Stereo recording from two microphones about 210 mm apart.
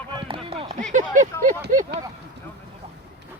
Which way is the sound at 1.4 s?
40° right (ahead or behind).